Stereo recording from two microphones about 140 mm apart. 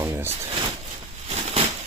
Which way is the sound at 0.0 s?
15° right (ahead or behind).